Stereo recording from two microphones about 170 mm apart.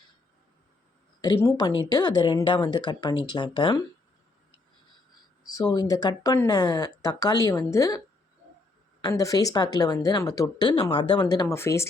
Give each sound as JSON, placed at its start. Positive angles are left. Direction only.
{"t": 1.2, "sound": "speech", "side_deg": 20}
{"t": 5.5, "sound": "speech", "side_deg": 25}